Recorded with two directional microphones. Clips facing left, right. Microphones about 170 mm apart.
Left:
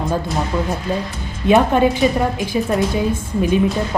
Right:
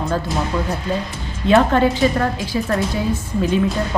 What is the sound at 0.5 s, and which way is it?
Speech, 20° left (ahead or behind).